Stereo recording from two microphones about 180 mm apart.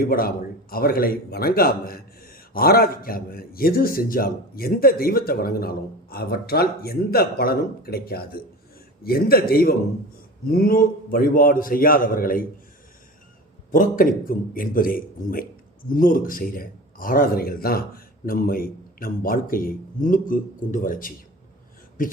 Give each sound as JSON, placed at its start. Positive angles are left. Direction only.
{"t": 0.0, "sound": "a man's voice", "side_deg": 55}
{"t": 13.7, "sound": "a man's voice", "side_deg": 50}